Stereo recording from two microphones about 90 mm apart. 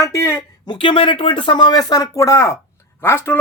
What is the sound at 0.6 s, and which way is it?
Speech, 70° left (ahead or behind).